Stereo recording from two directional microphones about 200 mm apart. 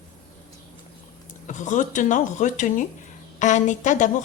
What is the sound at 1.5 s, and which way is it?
Speech, 40° left (ahead or behind).